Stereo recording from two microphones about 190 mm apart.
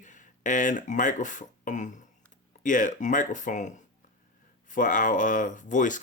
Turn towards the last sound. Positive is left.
turn(degrees=40)  # may be behind; listen again after turning